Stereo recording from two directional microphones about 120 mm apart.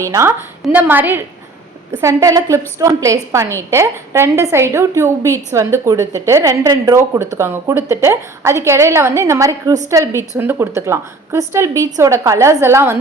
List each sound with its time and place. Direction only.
0.1 s a woman's voice: 20° right (ahead or behind)